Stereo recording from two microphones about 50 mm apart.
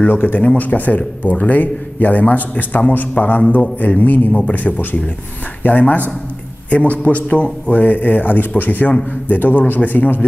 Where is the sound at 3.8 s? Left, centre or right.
Left.